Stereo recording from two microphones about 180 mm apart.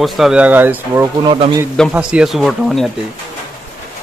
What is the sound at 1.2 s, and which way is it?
Speech, 30° right (ahead or behind).